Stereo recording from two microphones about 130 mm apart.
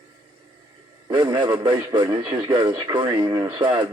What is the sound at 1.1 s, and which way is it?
Speech, 35° right (ahead or behind).